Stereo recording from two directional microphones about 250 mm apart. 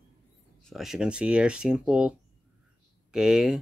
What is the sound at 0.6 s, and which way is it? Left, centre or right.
Speech, centre.